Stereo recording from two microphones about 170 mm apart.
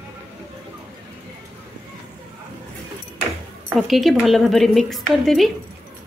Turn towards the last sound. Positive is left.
turn(degrees=0)  # may be behind; listen again after turning